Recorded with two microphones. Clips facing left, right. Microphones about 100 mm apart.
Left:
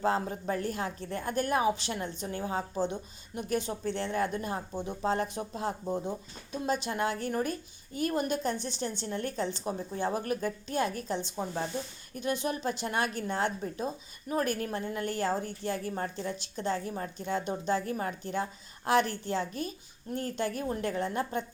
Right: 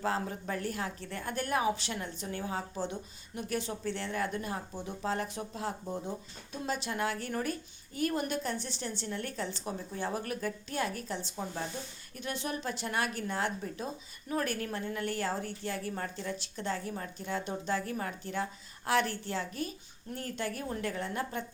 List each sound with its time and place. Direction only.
0.0 s a woman's voice: 25° left (ahead or behind)